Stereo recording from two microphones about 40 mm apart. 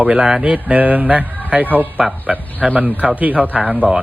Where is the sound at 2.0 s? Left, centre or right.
Centre.